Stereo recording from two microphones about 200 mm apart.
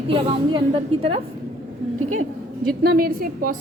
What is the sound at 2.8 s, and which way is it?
Speech, 45° right (ahead or behind).